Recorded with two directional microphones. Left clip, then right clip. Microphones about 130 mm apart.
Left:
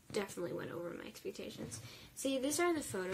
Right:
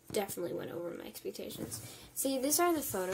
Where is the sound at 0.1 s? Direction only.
10° left (ahead or behind).